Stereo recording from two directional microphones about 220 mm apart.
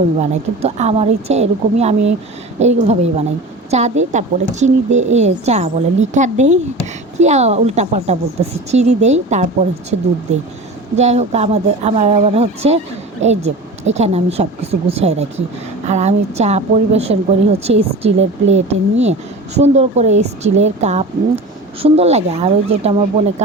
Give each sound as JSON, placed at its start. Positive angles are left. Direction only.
{"t": 0.2, "sound": "a woman's voice", "side_deg": -30}
{"t": 10.9, "sound": "a woman's voice", "side_deg": -30}